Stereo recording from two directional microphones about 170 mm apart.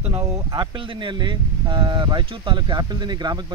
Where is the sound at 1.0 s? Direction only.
30° right (ahead or behind).